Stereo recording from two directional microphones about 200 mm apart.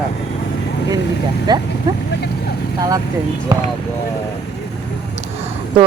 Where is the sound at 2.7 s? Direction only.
20° right (ahead or behind).